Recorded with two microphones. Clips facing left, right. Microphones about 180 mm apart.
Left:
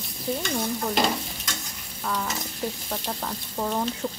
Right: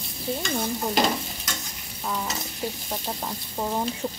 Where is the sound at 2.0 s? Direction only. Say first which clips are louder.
Left 1 dB; 20° right (ahead or behind).